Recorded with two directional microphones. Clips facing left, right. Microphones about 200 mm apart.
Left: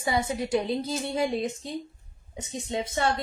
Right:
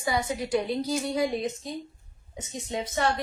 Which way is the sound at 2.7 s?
30° left (ahead or behind).